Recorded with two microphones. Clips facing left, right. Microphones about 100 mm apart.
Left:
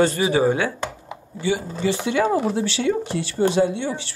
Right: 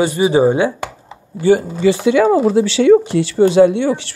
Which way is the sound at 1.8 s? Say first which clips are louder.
Right 8 dB; 90° right.